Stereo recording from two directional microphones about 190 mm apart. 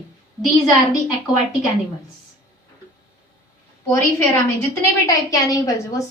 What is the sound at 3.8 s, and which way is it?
A woman's voice, 15° left (ahead or behind).